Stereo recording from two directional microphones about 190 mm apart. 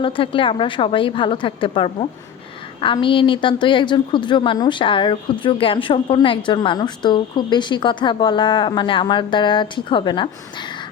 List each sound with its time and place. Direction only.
0.0 s speech: 30° left (ahead or behind)